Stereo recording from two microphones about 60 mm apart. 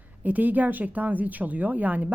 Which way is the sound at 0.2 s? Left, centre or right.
Right.